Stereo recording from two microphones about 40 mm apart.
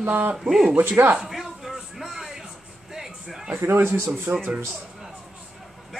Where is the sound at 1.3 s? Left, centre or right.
Centre.